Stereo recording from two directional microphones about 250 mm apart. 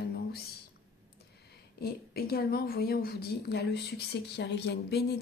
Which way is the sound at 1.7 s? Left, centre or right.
Left.